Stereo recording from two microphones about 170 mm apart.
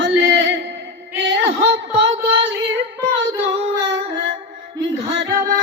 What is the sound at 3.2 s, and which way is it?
Female singing, 90° right.